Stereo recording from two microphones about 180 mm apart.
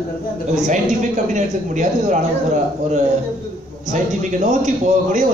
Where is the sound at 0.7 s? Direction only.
45° right (ahead or behind).